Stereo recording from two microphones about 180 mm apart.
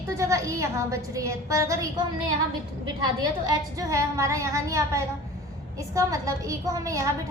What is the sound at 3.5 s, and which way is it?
A woman's voice, 20° right (ahead or behind).